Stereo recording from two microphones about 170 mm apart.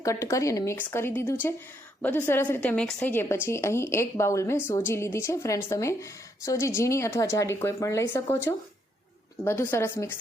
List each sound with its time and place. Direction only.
0.0 s a woman's voice: 15° left (ahead or behind)